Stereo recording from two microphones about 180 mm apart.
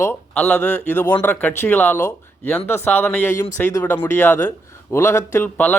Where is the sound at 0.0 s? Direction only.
10° left (ahead or behind).